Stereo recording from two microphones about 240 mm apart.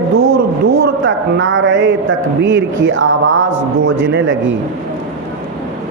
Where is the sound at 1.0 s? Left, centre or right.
Right.